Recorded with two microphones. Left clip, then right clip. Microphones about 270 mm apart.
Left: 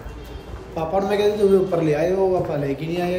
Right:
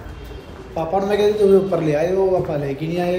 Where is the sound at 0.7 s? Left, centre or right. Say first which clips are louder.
Right 2 dB; centre.